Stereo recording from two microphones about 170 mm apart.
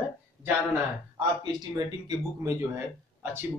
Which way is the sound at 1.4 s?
25° right (ahead or behind).